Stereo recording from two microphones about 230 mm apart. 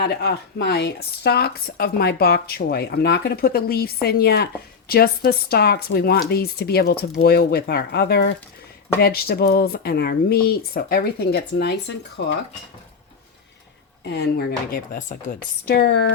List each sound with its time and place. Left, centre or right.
0.0 s speech: left
14.0 s speech: left